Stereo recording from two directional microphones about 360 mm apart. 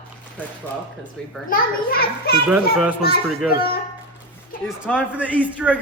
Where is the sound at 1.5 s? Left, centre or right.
Left.